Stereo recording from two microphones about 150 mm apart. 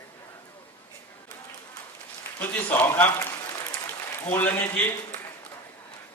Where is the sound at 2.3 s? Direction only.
10° left (ahead or behind).